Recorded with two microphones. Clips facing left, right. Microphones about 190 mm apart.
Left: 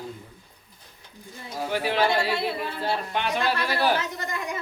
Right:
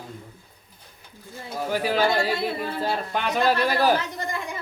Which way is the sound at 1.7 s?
40° right (ahead or behind).